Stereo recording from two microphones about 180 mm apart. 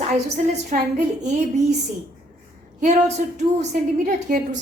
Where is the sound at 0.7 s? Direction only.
40° right (ahead or behind).